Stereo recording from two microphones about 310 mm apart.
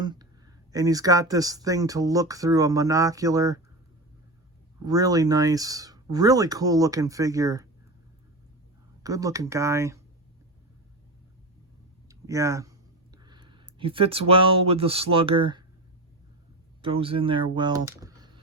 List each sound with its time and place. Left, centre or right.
0.0 s a sound: centre
0.7 s speech: centre
4.9 s speech: centre
9.0 s speech: centre
12.0 s a sound: centre
13.2 s speech: centre
16.8 s speech: centre